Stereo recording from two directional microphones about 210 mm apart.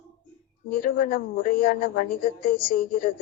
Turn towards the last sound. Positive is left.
turn(degrees=45)  # may be behind; listen again after turning